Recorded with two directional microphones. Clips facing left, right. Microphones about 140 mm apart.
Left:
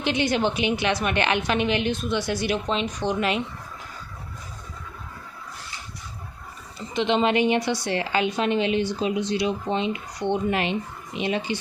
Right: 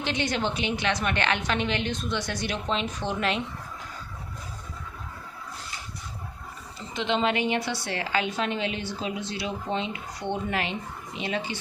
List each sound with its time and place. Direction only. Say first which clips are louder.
0.0 s a woman's voice: left 5 dB; 15° left (ahead or behind)
6.9 s a woman's voice: left 4 dB; 20° left (ahead or behind)